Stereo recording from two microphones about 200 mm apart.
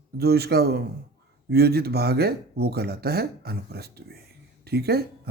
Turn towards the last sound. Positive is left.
turn(degrees=-50)  # may be behind; listen again after turning